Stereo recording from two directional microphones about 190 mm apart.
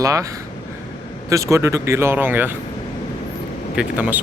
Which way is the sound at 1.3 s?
15° right (ahead or behind).